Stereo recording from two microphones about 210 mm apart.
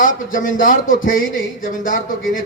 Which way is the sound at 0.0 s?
40° left (ahead or behind).